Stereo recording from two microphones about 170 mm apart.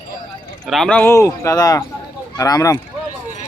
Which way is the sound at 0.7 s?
5° left (ahead or behind).